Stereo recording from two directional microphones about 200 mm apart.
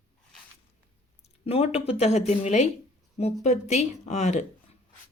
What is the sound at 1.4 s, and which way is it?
Speech, 30° left (ahead or behind).